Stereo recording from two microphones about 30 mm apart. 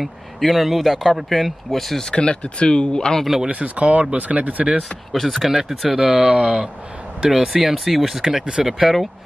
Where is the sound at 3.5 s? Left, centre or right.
Right.